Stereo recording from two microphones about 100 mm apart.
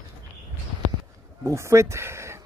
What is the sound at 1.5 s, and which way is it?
Speech, 30° right (ahead or behind).